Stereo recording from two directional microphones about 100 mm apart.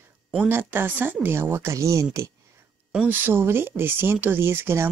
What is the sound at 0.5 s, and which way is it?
Speech, 20° right (ahead or behind).